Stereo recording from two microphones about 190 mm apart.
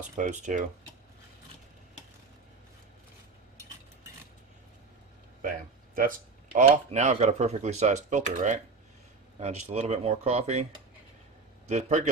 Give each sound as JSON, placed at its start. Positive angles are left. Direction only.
{"t": 0.0, "sound": "speech", "side_deg": -40}
{"t": 5.9, "sound": "speech", "side_deg": -45}